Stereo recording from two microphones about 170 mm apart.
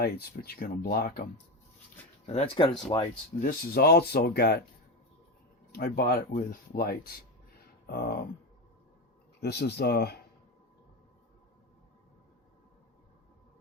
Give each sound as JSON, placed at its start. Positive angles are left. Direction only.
{"t": 0.0, "sound": "speech", "side_deg": 65}
{"t": 2.2, "sound": "speech", "side_deg": 40}
{"t": 2.9, "sound": "speech", "side_deg": 25}
{"t": 3.4, "sound": "speech", "side_deg": 65}
{"t": 5.7, "sound": "speech", "side_deg": 65}
{"t": 9.4, "sound": "speech", "side_deg": 75}